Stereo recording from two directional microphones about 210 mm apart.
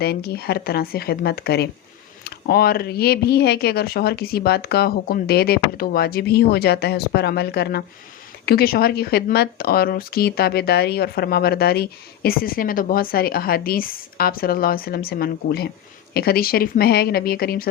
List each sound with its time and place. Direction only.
0.0 s speech: 50° left (ahead or behind)